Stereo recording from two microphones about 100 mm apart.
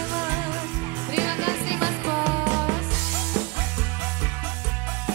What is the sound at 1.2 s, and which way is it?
Music, 20° right (ahead or behind).